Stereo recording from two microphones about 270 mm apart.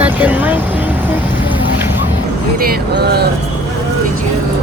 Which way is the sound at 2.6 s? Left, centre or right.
Right.